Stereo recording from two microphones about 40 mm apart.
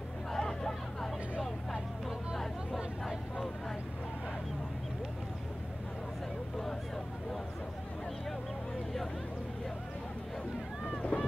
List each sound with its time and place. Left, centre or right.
0.3 s vehicle: centre
11.0 s boat: left